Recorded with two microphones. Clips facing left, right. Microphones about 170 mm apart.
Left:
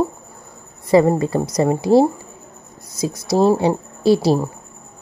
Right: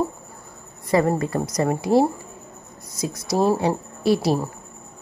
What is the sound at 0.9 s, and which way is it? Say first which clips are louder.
Speech: left 6 dB; 25° left (ahead or behind).